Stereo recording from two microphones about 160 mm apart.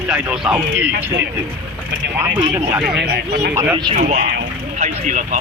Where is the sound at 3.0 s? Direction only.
80° right.